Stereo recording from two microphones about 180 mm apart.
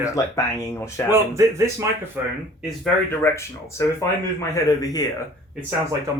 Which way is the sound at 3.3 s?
15° left (ahead or behind).